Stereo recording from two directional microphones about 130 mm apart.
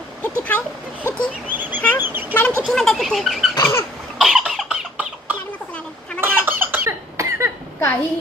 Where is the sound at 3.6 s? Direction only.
20° left (ahead or behind).